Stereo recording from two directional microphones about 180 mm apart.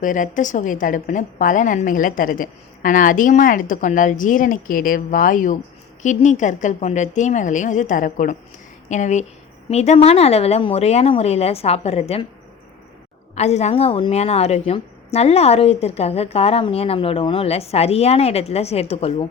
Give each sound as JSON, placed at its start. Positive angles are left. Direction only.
{"t": 0.0, "sound": "a woman's voice", "side_deg": 45}
{"t": 13.3, "sound": "a woman's voice", "side_deg": 40}